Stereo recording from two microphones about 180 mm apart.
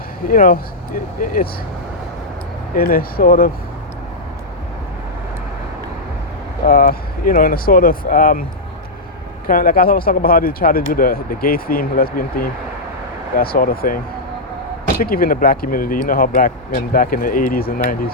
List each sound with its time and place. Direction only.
0.3 s speech: 50° left (ahead or behind)
2.7 s speech: 55° left (ahead or behind)
6.7 s speech: 55° left (ahead or behind)
9.5 s speech: 50° left (ahead or behind)
15.0 s speech: 55° left (ahead or behind)